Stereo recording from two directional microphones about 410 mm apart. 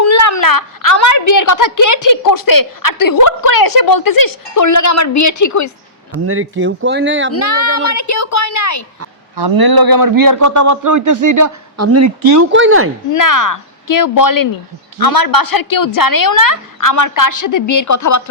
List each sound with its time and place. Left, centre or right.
0.0 s a woman's voice: left
6.2 s speech: right
7.4 s a woman's voice: left
9.3 s a man's voice: right
13.1 s a woman's voice: left